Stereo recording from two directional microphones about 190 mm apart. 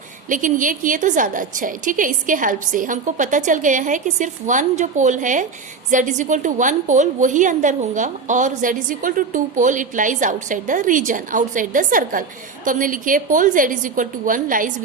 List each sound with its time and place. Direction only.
0.3 s a woman's voice: 45° right (ahead or behind)